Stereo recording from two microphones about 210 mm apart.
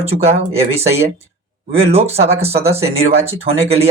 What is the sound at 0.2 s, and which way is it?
A man's voice, 30° right (ahead or behind).